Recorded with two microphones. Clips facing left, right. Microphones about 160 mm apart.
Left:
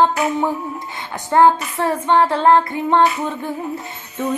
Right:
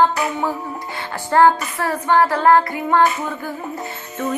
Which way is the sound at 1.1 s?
20° left (ahead or behind).